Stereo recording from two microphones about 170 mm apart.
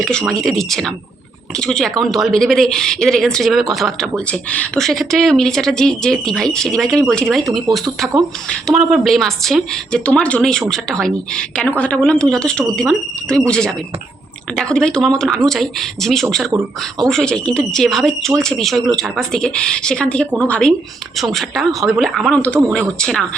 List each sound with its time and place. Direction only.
0.0 s a woman's voice: 5° left (ahead or behind)
8.4 s a woman's voice: centre (ahead or behind)
16.5 s speech: 20° right (ahead or behind)
17.1 s a woman's voice: 5° left (ahead or behind)